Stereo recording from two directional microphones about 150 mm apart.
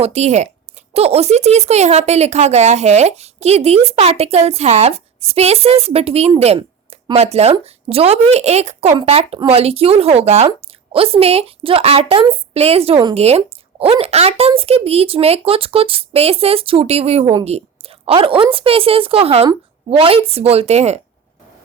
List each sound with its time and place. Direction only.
0.0 s a woman's voice: 45° right (ahead or behind)